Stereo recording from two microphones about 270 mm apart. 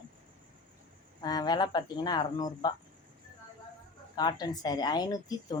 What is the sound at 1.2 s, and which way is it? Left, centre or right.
A woman's voice, centre.